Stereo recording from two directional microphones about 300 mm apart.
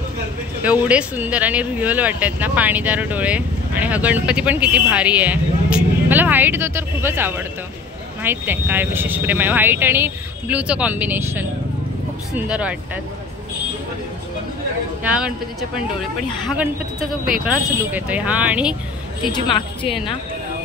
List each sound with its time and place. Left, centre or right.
0.6 s speech: centre
15.0 s speech: centre
17.3 s speech: centre
19.2 s a woman's voice: centre